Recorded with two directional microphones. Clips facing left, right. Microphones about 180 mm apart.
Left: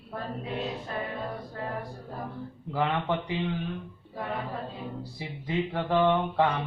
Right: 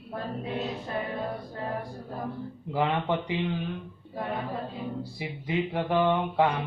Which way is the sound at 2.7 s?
15° right (ahead or behind).